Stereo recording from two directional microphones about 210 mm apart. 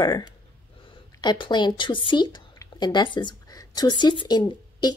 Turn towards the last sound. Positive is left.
turn(degrees=20)  # may be behind; listen again after turning